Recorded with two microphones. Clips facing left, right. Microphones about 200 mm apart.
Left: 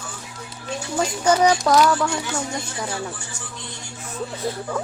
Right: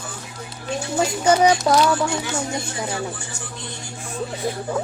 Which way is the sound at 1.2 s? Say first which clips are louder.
Right 1 dB; 10° right (ahead or behind).